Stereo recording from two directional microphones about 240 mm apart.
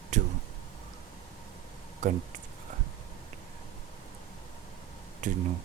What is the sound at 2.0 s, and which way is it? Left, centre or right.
Speech, right.